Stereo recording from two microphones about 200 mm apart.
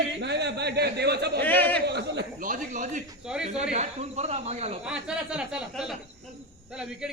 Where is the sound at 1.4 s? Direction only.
10° left (ahead or behind).